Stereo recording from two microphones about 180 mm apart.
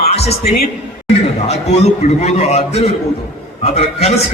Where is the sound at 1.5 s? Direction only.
35° left (ahead or behind).